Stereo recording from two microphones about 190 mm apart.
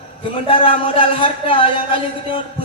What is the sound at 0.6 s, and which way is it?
A man's voice, 30° left (ahead or behind).